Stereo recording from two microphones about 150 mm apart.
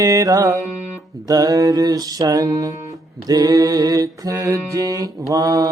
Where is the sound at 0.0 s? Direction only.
20° right (ahead or behind).